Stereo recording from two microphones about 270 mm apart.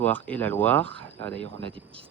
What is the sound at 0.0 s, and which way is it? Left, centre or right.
Speech, centre.